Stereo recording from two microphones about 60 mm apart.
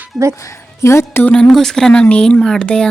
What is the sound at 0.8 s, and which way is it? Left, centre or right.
Speech, left.